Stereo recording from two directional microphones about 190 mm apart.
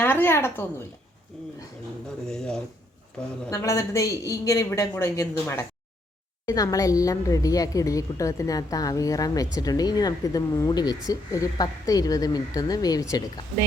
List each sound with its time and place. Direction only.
0.0 s a woman's voice: 10° left (ahead or behind)
3.5 s a man's voice: 15° left (ahead or behind)
6.4 s a woman's voice: 20° left (ahead or behind)